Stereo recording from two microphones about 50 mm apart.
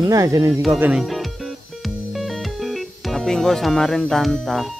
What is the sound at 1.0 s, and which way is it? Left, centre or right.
Music, centre.